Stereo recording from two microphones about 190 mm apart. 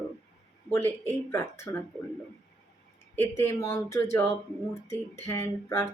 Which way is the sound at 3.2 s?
15° left (ahead or behind).